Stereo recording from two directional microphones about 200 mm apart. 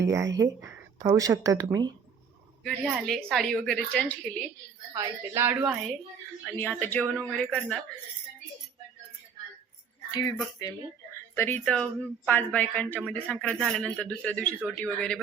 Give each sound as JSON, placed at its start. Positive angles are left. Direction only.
{"t": 0.0, "sound": "speech", "side_deg": -15}
{"t": 2.6, "sound": "a woman's voice", "side_deg": 0}
{"t": 4.9, "sound": "speech", "side_deg": -10}
{"t": 10.6, "sound": "a woman's voice", "side_deg": 15}